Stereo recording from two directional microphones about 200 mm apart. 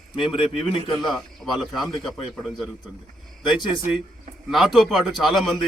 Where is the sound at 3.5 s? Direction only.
20° left (ahead or behind).